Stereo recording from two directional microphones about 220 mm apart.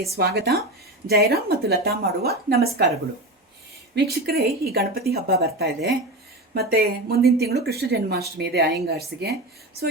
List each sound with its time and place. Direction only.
0.0 s a woman's voice: 45° right (ahead or behind)
3.9 s a woman's voice: 45° right (ahead or behind)